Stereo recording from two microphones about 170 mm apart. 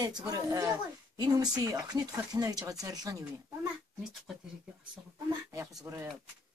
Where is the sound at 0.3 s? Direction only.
20° right (ahead or behind).